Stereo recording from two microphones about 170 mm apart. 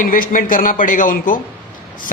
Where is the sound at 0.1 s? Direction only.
55° left (ahead or behind).